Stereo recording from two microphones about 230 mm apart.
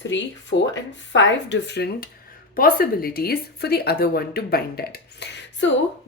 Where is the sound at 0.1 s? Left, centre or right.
Left.